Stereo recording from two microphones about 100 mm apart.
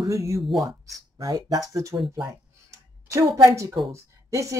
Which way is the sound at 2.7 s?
30° right (ahead or behind).